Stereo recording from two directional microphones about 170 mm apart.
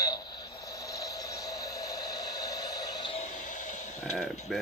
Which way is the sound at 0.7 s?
20° left (ahead or behind).